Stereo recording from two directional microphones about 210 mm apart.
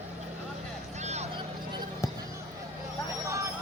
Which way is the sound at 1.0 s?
30° right (ahead or behind).